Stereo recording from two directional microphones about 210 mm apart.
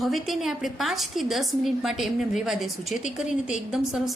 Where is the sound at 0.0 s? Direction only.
Centre (ahead or behind).